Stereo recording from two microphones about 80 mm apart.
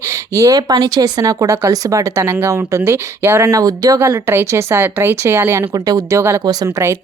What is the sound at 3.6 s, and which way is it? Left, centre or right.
Speech, right.